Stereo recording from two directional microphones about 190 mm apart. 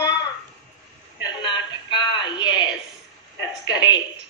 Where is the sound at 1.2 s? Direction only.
25° left (ahead or behind).